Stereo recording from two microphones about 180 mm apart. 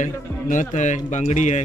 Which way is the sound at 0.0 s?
45° left (ahead or behind).